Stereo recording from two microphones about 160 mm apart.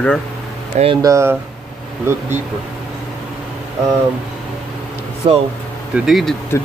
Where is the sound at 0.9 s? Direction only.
20° right (ahead or behind).